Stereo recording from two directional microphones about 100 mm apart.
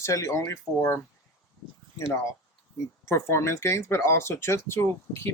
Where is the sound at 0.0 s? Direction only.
30° left (ahead or behind).